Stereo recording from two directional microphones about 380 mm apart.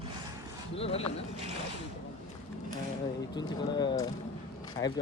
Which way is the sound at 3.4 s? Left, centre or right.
Centre.